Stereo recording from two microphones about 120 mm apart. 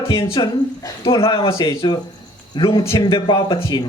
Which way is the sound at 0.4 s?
35° left (ahead or behind).